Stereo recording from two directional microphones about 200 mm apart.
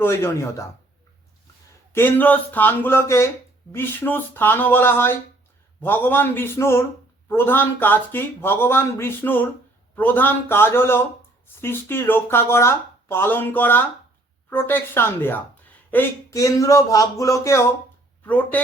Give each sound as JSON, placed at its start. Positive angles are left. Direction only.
{"t": 0.0, "sound": "speech", "side_deg": 10}
{"t": 1.9, "sound": "speech", "side_deg": 10}